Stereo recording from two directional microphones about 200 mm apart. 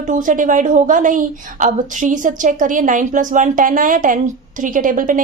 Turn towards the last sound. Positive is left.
turn(degrees=-40)  # may be behind; listen again after turning